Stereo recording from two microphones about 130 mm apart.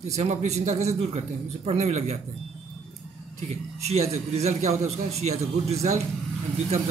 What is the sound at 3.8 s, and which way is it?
Speech, 55° right (ahead or behind).